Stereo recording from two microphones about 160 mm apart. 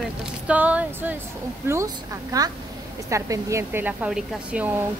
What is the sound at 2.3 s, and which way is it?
Speech, 20° right (ahead or behind).